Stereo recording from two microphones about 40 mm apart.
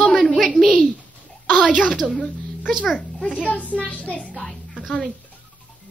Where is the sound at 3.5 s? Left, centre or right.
Left.